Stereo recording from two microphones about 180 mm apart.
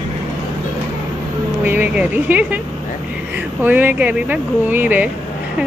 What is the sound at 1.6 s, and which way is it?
Speech, 10° right (ahead or behind).